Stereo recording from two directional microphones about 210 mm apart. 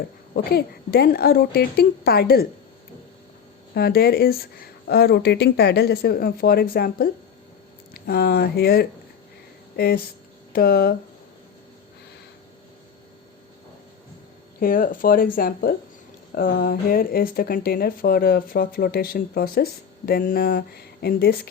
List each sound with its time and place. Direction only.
0.3 s speech: 45° left (ahead or behind)
3.8 s speech: 45° left (ahead or behind)
14.6 s speech: 40° left (ahead or behind)